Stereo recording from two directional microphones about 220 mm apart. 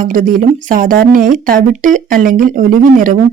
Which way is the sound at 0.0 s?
40° right (ahead or behind).